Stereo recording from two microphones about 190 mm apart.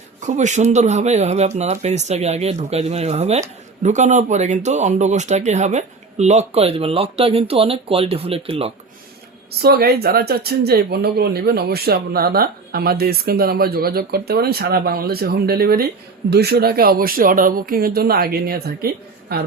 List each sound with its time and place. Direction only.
0.3 s speech: 40° right (ahead or behind)
9.5 s speech: 55° right (ahead or behind)